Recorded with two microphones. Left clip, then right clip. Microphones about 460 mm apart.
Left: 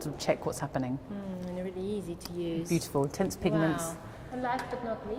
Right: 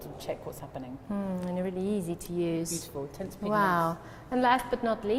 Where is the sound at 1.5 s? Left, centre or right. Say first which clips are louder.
Right 3 dB; right.